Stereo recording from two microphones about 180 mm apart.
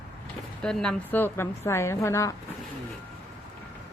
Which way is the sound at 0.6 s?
5° left (ahead or behind).